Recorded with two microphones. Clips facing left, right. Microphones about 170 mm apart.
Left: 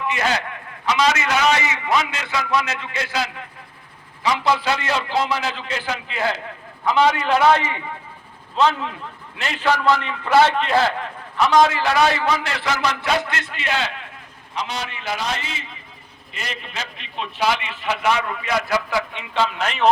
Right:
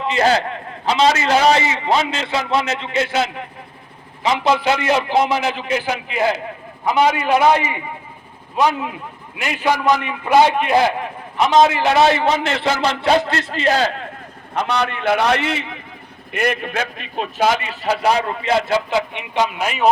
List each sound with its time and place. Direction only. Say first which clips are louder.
0.0 s a man's voice: right 6 dB; 30° right (ahead or behind)
14.5 s a man's voice: right 8 dB; 60° right (ahead or behind); by 19.9 s 10° right (ahead or behind)